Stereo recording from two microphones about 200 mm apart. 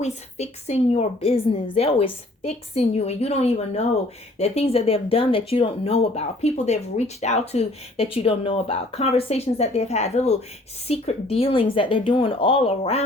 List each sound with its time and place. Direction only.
0.0 s speech: 35° left (ahead or behind)